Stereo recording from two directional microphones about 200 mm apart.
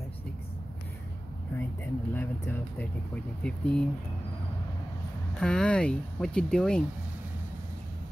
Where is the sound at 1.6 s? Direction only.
10° left (ahead or behind).